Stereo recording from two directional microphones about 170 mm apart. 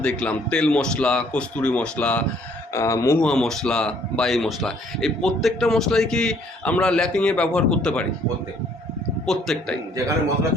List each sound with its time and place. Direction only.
0.0 s speech: 5° left (ahead or behind)
3.2 s speech: 5° left (ahead or behind)
9.2 s speech: 5° left (ahead or behind)